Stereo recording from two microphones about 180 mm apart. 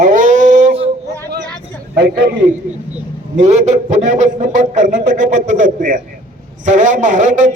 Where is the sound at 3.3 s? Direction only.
40° right (ahead or behind).